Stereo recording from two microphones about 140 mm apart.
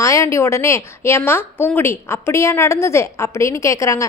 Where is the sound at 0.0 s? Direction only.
20° left (ahead or behind).